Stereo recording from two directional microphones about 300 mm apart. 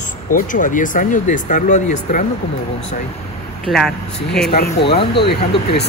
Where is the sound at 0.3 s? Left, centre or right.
Left.